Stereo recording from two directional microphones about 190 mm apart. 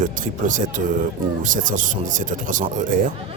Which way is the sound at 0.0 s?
45° right (ahead or behind).